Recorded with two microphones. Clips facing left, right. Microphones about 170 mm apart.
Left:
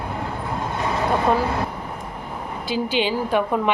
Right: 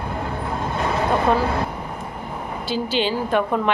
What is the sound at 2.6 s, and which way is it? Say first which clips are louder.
A woman's voice: even; 10° left (ahead or behind).